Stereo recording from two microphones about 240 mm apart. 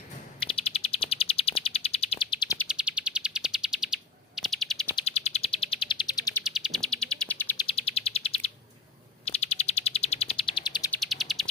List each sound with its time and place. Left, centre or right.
0.3 s chirp: left
2.6 s bird: centre
5.0 s bird: left
6.4 s bird: centre
7.8 s chirp: left
9.2 s bird: left
11.0 s bird: centre